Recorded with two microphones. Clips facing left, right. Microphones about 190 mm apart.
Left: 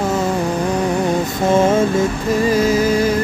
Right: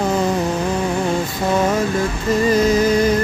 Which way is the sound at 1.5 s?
25° left (ahead or behind).